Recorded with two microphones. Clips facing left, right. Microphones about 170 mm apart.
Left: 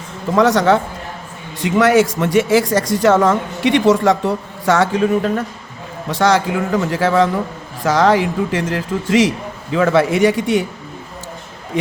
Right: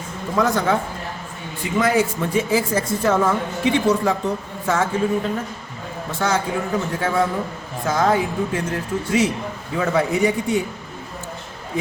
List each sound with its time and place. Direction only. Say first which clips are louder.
0.3 s speech: left 6 dB; 80° left
6.1 s a man's voice: left 7 dB; 85° left